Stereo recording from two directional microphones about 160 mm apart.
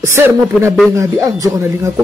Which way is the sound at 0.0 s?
15° right (ahead or behind).